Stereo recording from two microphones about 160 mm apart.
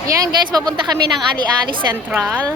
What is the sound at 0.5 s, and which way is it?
Speech, 25° right (ahead or behind).